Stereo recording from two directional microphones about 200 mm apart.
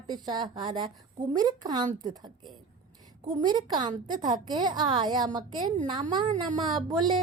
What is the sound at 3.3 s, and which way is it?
Speech, 20° right (ahead or behind).